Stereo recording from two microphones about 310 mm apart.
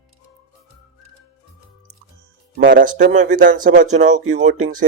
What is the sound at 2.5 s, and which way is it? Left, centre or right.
Speech, right.